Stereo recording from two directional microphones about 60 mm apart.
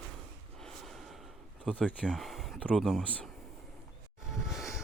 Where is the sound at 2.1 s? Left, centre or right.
Centre.